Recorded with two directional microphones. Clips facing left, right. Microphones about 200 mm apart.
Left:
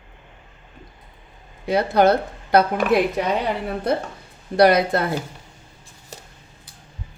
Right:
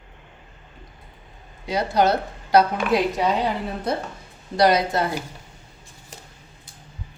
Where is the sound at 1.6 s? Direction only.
55° left (ahead or behind).